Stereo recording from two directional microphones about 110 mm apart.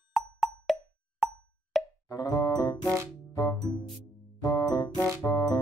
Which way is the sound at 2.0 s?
35° left (ahead or behind).